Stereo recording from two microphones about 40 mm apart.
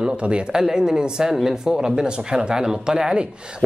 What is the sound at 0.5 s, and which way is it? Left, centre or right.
Speech, centre.